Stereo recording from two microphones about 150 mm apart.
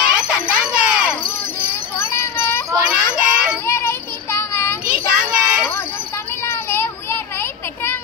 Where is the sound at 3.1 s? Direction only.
5° right (ahead or behind).